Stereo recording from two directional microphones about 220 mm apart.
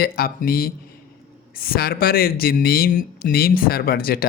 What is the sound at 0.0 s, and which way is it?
Speech, 45° left (ahead or behind).